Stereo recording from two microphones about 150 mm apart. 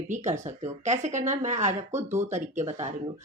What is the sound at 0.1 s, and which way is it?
Speech, 50° right (ahead or behind).